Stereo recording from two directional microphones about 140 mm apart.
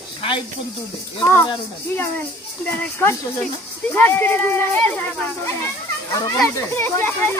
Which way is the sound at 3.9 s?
15° left (ahead or behind).